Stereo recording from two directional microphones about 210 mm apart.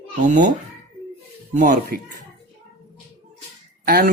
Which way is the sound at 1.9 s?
45° right (ahead or behind).